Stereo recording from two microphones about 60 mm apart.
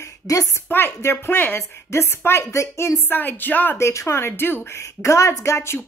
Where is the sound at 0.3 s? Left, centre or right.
Left.